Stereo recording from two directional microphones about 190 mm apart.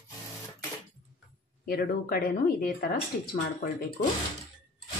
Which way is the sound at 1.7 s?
50° left (ahead or behind).